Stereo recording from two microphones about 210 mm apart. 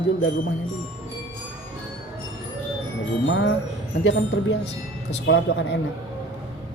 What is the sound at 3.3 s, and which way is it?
Music, 65° left (ahead or behind).